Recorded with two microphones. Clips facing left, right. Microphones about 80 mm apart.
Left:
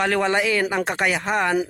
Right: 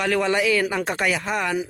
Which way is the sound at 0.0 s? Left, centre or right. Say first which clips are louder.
Left 1 dB; left.